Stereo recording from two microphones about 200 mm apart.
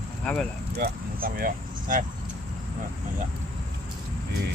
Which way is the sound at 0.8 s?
45° right (ahead or behind).